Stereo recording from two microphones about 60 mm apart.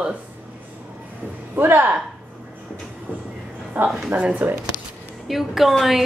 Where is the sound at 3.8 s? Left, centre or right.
Right.